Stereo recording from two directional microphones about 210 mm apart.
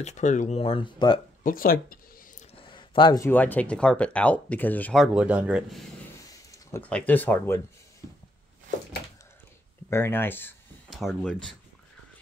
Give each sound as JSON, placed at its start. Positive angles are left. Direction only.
{"t": 0.0, "sound": "speech", "side_deg": 35}
{"t": 1.4, "sound": "speech", "side_deg": 45}
{"t": 2.6, "sound": "speech", "side_deg": 25}
{"t": 6.5, "sound": "speech", "side_deg": 10}
{"t": 9.8, "sound": "a sound", "side_deg": 10}
{"t": 11.0, "sound": "speech", "side_deg": 0}